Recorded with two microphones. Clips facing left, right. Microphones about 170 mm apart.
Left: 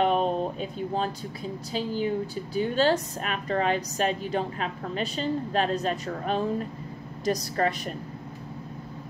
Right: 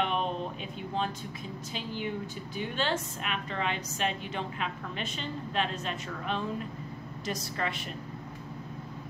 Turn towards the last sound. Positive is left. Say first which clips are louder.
# left 8 dB
turn(degrees=40)  # may be behind; listen again after turning